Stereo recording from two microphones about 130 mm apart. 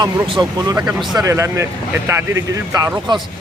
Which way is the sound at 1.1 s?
25° right (ahead or behind).